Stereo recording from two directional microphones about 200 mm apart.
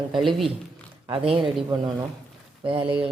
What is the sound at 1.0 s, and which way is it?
Speech, 25° right (ahead or behind).